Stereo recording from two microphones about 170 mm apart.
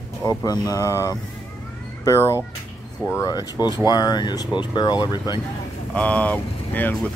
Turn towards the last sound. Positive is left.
turn(degrees=10)  # may be behind; listen again after turning